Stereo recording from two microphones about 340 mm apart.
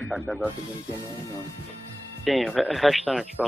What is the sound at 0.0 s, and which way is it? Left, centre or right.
Speech, centre.